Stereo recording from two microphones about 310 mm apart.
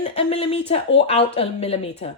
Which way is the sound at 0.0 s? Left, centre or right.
Centre.